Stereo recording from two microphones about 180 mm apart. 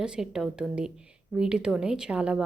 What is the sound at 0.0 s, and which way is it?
A woman's voice, 5° right (ahead or behind).